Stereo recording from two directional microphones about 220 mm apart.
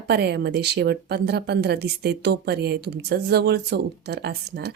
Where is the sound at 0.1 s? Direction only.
50° right (ahead or behind).